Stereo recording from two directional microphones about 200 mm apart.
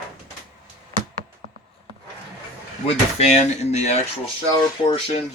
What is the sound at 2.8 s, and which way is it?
Speech, 30° left (ahead or behind).